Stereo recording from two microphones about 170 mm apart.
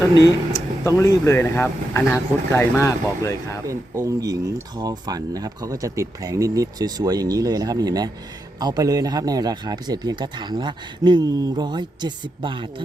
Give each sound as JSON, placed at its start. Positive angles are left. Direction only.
{"t": 0.2, "sound": "speech", "side_deg": 20}
{"t": 3.7, "sound": "speech", "side_deg": -20}